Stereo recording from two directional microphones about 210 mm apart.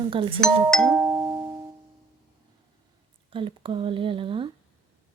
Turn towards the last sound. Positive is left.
turn(degrees=-25)  # may be behind; listen again after turning